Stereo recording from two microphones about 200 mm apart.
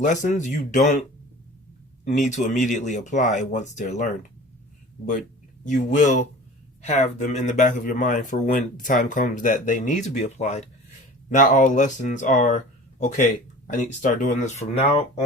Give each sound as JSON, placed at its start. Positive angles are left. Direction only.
{"t": 0.0, "sound": "speech", "side_deg": 40}
{"t": 2.0, "sound": "speech", "side_deg": 35}
{"t": 5.6, "sound": "speech", "side_deg": 40}